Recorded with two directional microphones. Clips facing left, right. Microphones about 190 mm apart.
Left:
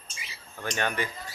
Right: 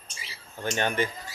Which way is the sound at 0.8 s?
25° right (ahead or behind).